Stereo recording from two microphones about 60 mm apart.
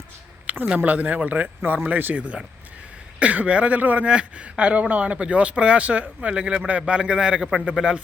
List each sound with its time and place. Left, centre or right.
0.4 s speech: right